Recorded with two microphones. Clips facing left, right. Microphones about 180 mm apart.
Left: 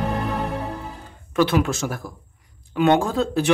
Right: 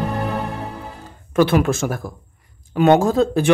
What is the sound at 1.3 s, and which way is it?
Speech, 50° right (ahead or behind).